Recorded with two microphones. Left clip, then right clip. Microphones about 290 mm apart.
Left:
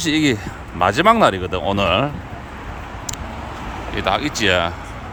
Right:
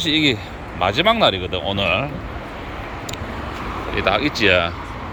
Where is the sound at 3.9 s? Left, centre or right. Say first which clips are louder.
Right 1 dB; centre.